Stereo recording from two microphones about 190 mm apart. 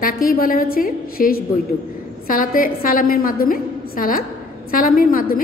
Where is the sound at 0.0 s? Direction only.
50° left (ahead or behind).